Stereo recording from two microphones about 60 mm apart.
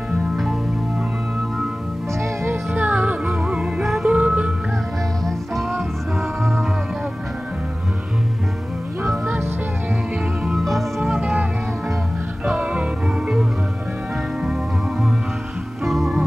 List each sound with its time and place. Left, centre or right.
2.7 s music: right
3.8 s music: centre
4.1 s music: centre
5.2 s music: centre
9.0 s music: centre
10.6 s music: centre
11.1 s music: centre
12.5 s music: centre
15.8 s music: centre